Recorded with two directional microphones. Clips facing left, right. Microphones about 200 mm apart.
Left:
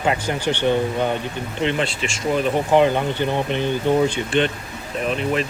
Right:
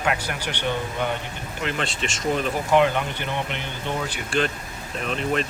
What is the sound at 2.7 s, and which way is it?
Speech, 20° left (ahead or behind).